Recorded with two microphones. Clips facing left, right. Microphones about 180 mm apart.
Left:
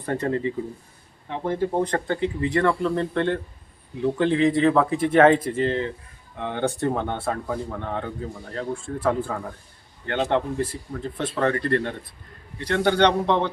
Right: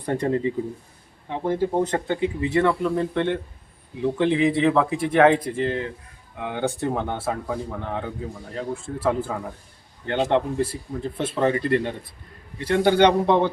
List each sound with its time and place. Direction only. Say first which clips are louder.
0.0 s a man's voice: right 2 dB; 15° right (ahead or behind)
4.7 s a man's voice: left 1 dB; centre (ahead or behind)